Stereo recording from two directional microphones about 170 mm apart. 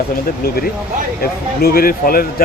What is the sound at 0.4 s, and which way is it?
Speech, 60° left (ahead or behind).